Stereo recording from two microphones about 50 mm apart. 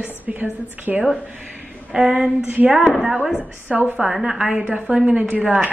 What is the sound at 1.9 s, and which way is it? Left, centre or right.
Speech, centre.